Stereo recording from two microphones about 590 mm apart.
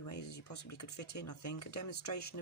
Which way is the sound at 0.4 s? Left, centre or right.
Left.